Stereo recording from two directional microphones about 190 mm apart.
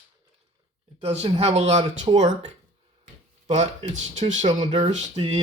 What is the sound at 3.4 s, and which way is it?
Speech, 35° right (ahead or behind).